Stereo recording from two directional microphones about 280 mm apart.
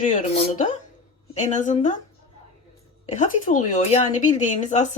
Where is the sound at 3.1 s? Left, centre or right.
Left.